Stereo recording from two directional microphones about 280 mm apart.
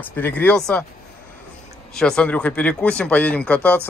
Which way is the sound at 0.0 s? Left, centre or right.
Centre.